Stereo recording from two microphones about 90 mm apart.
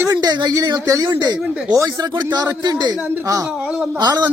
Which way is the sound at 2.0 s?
55° right (ahead or behind).